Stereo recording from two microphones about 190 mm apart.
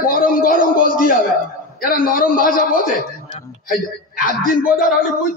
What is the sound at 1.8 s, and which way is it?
A man's voice, 50° left (ahead or behind).